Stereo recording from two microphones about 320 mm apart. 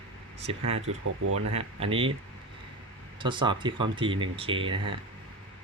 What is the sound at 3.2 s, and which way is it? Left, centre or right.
Speech, centre.